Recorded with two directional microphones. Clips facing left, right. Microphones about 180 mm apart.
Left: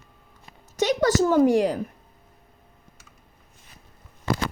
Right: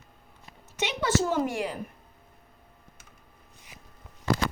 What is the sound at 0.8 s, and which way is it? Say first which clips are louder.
A woman's voice: left 6 dB; 40° left (ahead or behind).